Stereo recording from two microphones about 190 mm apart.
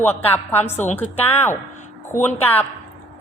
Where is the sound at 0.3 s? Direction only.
10° left (ahead or behind).